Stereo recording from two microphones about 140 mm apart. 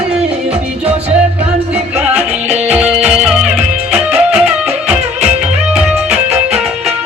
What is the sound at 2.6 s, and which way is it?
Music, 10° right (ahead or behind).